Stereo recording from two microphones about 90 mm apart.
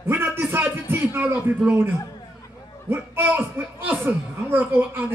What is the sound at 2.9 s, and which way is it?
Speech, 25° right (ahead or behind).